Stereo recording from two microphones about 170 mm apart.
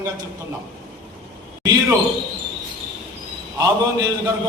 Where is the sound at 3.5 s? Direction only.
20° right (ahead or behind).